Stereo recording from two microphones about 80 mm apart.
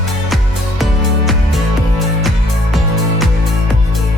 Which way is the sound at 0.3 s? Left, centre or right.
Centre.